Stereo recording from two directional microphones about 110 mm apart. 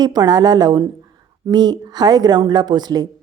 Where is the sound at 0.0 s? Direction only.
40° right (ahead or behind).